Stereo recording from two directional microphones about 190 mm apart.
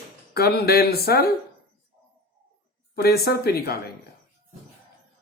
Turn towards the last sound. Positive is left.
turn(degrees=55)  # may be behind; listen again after turning